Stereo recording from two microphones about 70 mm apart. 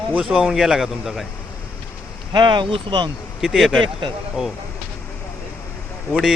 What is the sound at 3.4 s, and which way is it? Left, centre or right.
Speech, centre.